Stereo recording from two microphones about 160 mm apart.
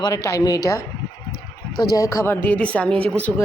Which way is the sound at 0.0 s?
20° left (ahead or behind).